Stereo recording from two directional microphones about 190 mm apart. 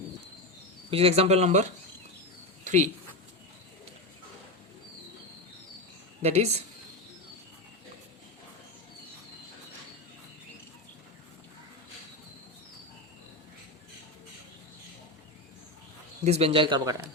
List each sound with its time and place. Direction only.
0.9 s speech: 30° right (ahead or behind)
6.2 s speech: 35° right (ahead or behind)
16.2 s speech: 35° right (ahead or behind)